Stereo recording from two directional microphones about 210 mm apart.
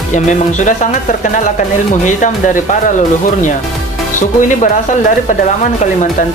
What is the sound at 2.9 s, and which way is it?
Speech, 35° left (ahead or behind).